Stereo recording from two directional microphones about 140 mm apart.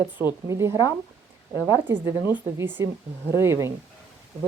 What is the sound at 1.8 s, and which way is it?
A woman's voice, 15° right (ahead or behind).